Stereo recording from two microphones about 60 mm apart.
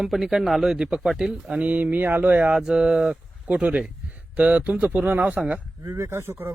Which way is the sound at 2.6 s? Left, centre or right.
Centre.